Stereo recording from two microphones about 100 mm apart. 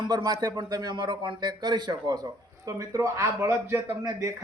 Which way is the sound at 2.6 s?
35° right (ahead or behind).